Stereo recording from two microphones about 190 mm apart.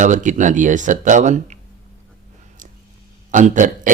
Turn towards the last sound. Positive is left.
turn(degrees=-40)  # may be behind; listen again after turning